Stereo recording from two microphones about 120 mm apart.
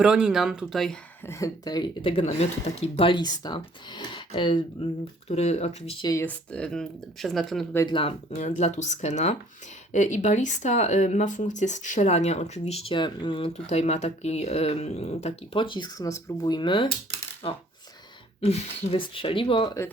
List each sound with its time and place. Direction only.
0.0 s speech: 5° right (ahead or behind)
1.3 s speech: 30° left (ahead or behind)
2.0 s speech: 45° left (ahead or behind)
2.2 s speech: 60° left (ahead or behind)
3.1 s speech: 35° left (ahead or behind)
5.3 s speech: 65° left (ahead or behind)
6.0 s speech: 30° left (ahead or behind)
6.2 s speech: 10° left (ahead or behind)
7.9 s speech: 45° left (ahead or behind)
8.4 s speech: 75° left (ahead or behind)
9.9 s speech: 85° left; by 12.9 s 60° left (ahead or behind)
12.9 s speech: 40° left (ahead or behind)
13.5 s speech: 70° left (ahead or behind)
15.5 s speech: 45° left (ahead or behind)